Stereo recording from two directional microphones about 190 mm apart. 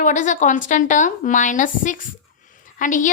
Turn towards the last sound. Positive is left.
turn(degrees=45)  # may be behind; listen again after turning